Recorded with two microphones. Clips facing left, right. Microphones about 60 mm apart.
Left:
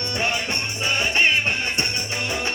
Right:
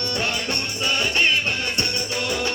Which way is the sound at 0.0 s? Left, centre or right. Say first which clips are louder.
Left 1 dB; left.